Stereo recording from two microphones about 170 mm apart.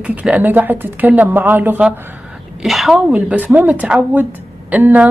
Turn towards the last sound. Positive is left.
turn(degrees=-10)  # may be behind; listen again after turning